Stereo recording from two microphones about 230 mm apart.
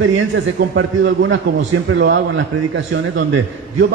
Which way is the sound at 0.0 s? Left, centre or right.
Right.